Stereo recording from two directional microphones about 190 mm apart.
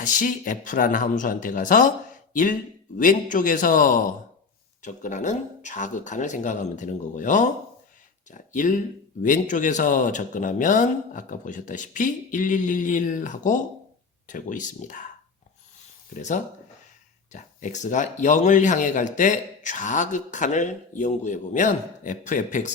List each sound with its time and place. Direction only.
0.0 s speech: 45° left (ahead or behind)
16.1 s speech: 40° left (ahead or behind)